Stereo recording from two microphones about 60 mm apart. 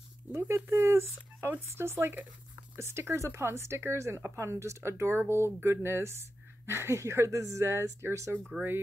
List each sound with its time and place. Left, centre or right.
0.3 s speech: right